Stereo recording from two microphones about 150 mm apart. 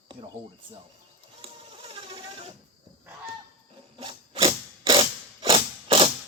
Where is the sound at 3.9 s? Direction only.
35° right (ahead or behind).